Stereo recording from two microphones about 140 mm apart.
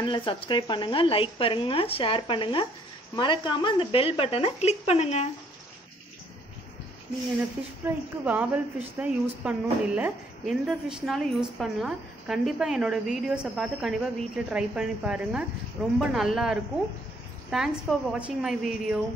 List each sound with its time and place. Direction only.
0.0 s speech: 35° left (ahead or behind)
7.8 s a woman's voice: 10° right (ahead or behind)